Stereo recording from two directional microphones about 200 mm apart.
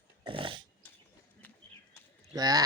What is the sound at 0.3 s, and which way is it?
Dog, 25° right (ahead or behind).